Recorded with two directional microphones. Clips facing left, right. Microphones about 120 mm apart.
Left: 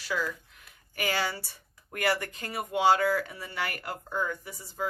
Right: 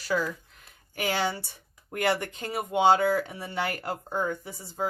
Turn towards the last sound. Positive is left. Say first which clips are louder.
# right 3 dB
turn(degrees=-30)  # may be behind; listen again after turning